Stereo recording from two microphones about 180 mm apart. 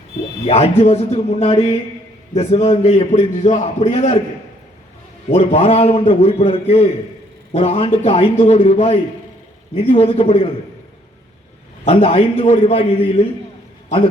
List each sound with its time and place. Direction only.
0.4 s a man's voice: 35° left (ahead or behind)
5.3 s a man's voice: 35° left (ahead or behind)
11.9 s a man's voice: 30° left (ahead or behind)